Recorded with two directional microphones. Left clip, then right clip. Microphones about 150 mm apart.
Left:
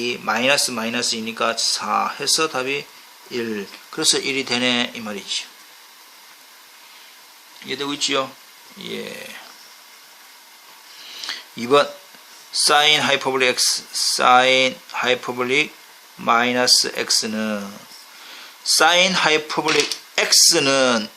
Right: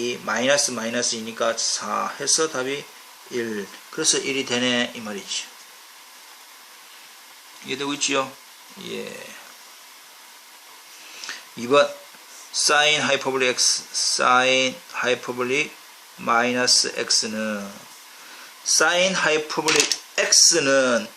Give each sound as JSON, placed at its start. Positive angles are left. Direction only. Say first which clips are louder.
{"t": 0.0, "sound": "speech", "louder": "left 3 dB", "side_deg": 40}
{"t": 7.7, "sound": "speech", "louder": "left 2 dB", "side_deg": 30}
{"t": 11.3, "sound": "a sound", "louder": "left 3 dB", "side_deg": 35}
{"t": 12.5, "sound": "speech", "louder": "left 3 dB", "side_deg": 35}
{"t": 18.8, "sound": "speech", "louder": "left 4 dB", "side_deg": 45}